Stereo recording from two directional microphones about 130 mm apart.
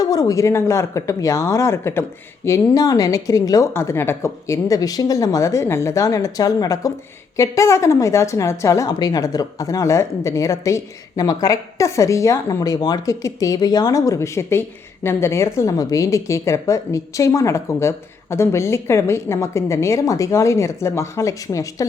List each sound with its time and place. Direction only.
0.0 s speech: 30° left (ahead or behind)